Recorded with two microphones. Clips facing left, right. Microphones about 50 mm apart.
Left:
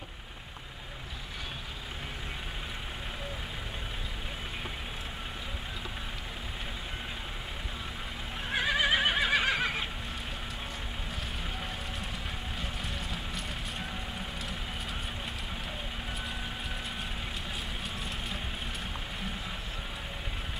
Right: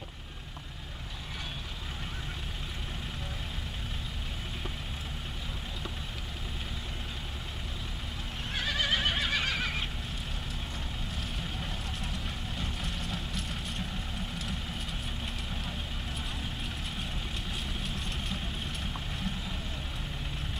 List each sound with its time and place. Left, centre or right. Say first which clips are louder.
8.5 s neigh: left 4 dB; centre
12.5 s vehicle: right 1 dB; centre
17.8 s vehicle: even; centre